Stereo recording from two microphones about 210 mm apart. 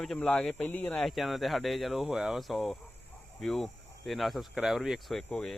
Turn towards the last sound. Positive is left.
turn(degrees=0)  # may be behind; listen again after turning